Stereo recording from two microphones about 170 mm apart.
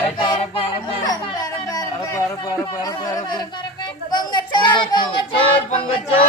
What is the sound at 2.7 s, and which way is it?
Speech, 20° left (ahead or behind).